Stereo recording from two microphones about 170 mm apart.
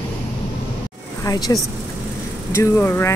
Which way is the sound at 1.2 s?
20° left (ahead or behind).